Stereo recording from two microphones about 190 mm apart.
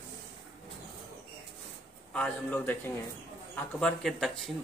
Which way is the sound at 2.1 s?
5° left (ahead or behind).